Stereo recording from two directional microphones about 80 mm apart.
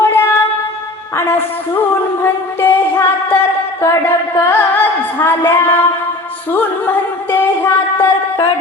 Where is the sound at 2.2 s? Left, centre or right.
Left.